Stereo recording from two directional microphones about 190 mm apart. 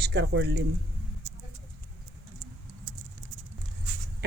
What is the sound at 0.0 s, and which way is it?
Speech, 60° right (ahead or behind).